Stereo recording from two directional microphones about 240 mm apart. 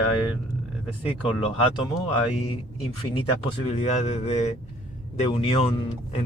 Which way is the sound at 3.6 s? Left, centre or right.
Left.